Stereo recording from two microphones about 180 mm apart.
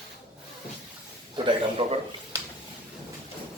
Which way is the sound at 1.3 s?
30° right (ahead or behind).